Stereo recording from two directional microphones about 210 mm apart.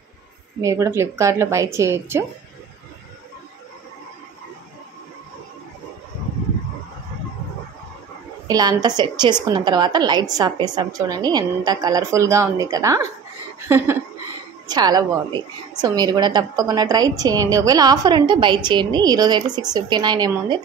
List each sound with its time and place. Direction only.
0.6 s speech: 15° right (ahead or behind)
8.5 s a woman's voice: 20° right (ahead or behind)
13.7 s a sound: 10° right (ahead or behind)
14.7 s a woman's voice: 20° right (ahead or behind)